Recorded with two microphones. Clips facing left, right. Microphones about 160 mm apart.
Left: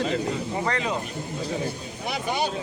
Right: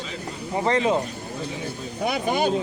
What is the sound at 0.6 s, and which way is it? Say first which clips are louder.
Speech: right 9 dB; 25° right (ahead or behind).